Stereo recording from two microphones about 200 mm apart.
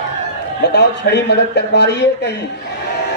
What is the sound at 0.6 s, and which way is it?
A man's voice, 55° left (ahead or behind).